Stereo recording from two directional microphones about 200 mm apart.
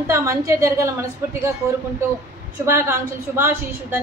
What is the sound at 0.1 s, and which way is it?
A woman's voice, 15° right (ahead or behind).